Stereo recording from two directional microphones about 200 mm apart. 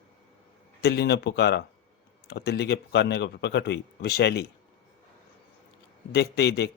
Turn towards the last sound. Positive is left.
turn(degrees=55)  # may be behind; listen again after turning